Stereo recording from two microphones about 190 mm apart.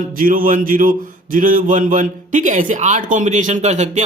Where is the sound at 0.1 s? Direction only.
45° right (ahead or behind).